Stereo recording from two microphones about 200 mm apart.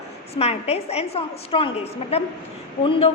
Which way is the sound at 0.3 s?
30° left (ahead or behind).